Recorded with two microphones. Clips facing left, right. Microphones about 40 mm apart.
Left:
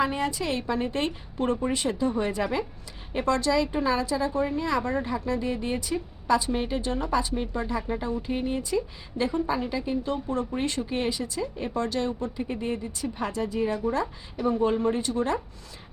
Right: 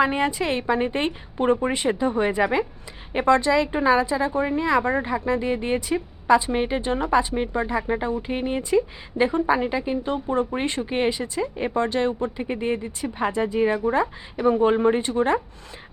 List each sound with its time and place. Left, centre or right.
0.0 s a woman's voice: right